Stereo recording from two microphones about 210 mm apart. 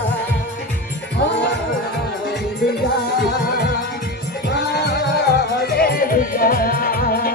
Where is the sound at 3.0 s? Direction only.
50° left (ahead or behind).